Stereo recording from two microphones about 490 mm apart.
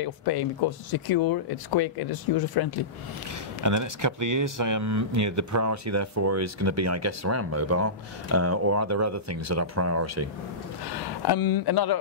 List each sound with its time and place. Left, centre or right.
0.0 s speech: left
3.6 s speech: right
10.9 s speech: left